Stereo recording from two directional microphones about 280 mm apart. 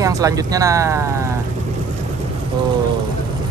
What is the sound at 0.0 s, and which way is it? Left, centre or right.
Speech, centre.